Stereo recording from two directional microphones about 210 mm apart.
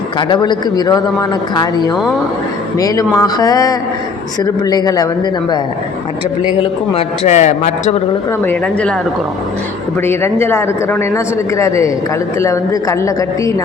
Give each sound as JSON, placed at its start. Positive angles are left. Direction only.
{"t": 0.2, "sound": "a man's voice", "side_deg": 20}
{"t": 6.6, "sound": "a man's voice", "side_deg": 30}
{"t": 8.4, "sound": "speech", "side_deg": 5}
{"t": 10.0, "sound": "speech", "side_deg": 10}